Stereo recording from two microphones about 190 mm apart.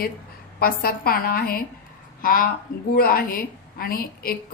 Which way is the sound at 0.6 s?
55° left (ahead or behind).